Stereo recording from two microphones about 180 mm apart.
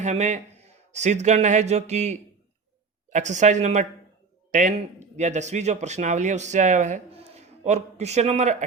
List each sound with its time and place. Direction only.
0.0 s a man's voice: 40° right (ahead or behind)